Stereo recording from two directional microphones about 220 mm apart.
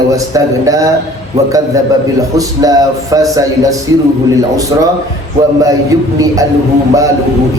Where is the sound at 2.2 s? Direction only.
15° right (ahead or behind).